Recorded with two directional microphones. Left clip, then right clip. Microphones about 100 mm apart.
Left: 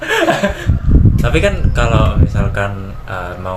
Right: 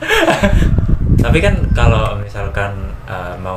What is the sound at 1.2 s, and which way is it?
Speech, 35° left (ahead or behind).